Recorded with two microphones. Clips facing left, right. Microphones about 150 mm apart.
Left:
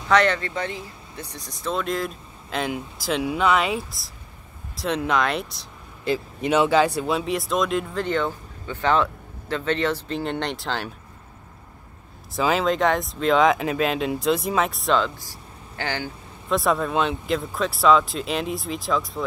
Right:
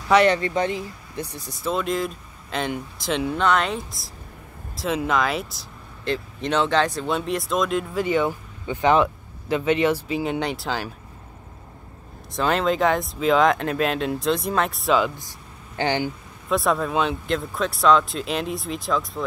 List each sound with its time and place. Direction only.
0.1 s speech: 15° right (ahead or behind)
1.3 s speech: 5° right (ahead or behind)
12.4 s speech: centre (ahead or behind)
15.1 s vehicle: 20° right (ahead or behind)
16.4 s speech: centre (ahead or behind)